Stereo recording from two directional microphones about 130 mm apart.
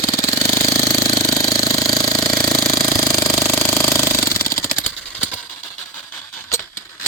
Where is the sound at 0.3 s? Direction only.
20° left (ahead or behind).